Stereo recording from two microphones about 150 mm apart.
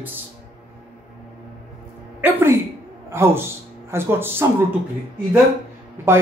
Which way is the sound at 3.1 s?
15° right (ahead or behind).